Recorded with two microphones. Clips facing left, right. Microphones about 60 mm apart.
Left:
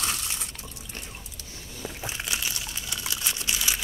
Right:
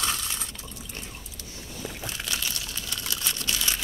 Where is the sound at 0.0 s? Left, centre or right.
Right.